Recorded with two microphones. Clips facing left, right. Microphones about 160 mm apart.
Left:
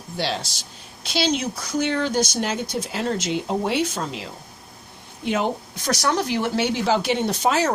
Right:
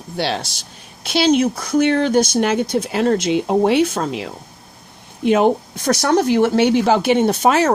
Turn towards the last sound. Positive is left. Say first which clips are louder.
# right 6 dB
turn(degrees=-55)  # may be behind; listen again after turning